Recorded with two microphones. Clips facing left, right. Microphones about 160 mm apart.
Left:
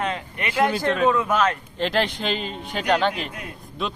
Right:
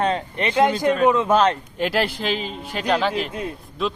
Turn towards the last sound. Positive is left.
turn(degrees=0)  # may be behind; listen again after turning